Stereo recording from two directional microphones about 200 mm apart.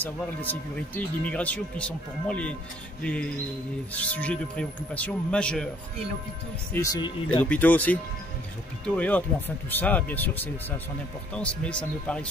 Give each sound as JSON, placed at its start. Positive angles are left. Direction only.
{"t": 0.0, "sound": "speech", "side_deg": 10}
{"t": 6.7, "sound": "speech", "side_deg": 15}